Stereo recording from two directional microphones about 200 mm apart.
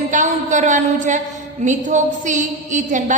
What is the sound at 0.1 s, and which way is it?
A woman's voice, 40° right (ahead or behind).